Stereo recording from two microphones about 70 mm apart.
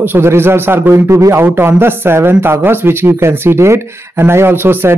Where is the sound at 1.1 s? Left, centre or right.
Right.